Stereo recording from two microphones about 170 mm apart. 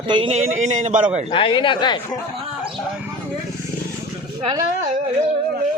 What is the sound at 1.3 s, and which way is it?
Speech, 30° left (ahead or behind).